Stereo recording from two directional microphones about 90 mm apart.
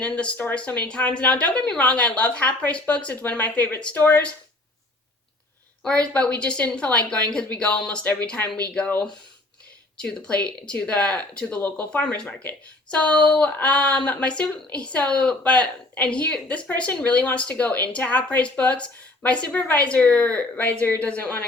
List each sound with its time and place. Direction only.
0.0 s speech: 15° left (ahead or behind)
5.8 s speech: 10° left (ahead or behind)
10.0 s speech: 10° left (ahead or behind)